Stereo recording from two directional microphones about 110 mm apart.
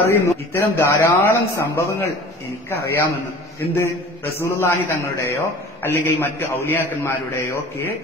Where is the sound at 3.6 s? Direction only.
25° left (ahead or behind).